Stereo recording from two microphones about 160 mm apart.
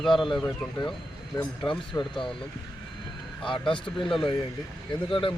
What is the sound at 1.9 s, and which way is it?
Speech, 20° left (ahead or behind).